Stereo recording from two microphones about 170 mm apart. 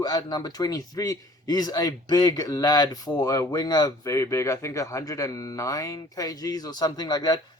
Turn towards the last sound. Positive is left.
turn(degrees=20)  # may be behind; listen again after turning